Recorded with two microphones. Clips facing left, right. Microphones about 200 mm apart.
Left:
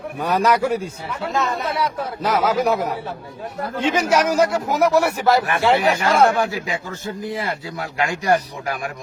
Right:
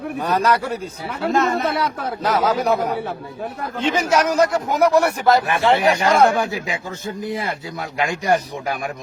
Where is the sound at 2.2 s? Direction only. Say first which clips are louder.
Even; 10° left (ahead or behind).